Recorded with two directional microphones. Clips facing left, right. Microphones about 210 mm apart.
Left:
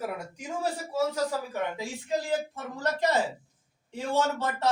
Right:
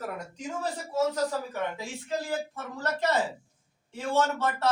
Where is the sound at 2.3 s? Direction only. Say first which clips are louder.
Left 3 dB; 15° left (ahead or behind).